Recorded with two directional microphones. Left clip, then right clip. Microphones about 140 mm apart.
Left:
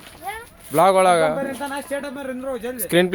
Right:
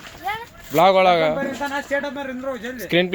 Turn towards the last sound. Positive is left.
turn(degrees=40)  # may be behind; listen again after turning